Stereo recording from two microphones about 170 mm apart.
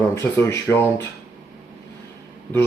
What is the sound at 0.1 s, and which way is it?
Speech, 15° left (ahead or behind).